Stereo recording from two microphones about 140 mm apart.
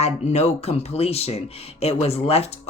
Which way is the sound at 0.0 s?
50° left (ahead or behind).